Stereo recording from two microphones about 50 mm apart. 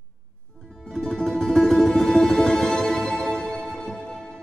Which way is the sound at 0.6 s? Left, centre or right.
Centre.